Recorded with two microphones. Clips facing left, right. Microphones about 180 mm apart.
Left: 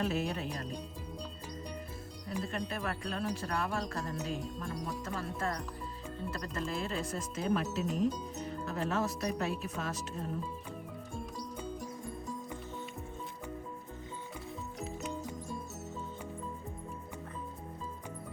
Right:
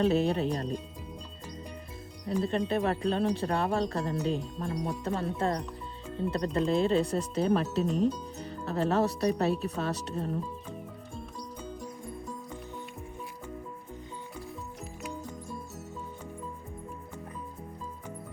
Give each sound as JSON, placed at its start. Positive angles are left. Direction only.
{"t": 0.0, "sound": "speech", "side_deg": -30}
{"t": 2.4, "sound": "speech", "side_deg": -30}